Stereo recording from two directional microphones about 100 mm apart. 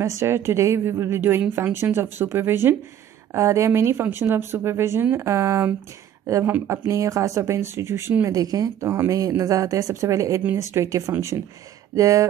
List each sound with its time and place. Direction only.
0.0 s speech: 30° right (ahead or behind)
8.3 s speech: 35° right (ahead or behind)